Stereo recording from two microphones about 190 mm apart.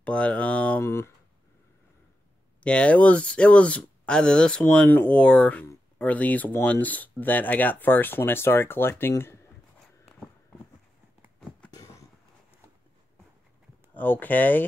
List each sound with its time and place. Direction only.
0.0 s speech: 5° left (ahead or behind)
2.6 s speech: 5° left (ahead or behind)
11.7 s a sound: 15° left (ahead or behind)
13.9 s speech: 10° left (ahead or behind)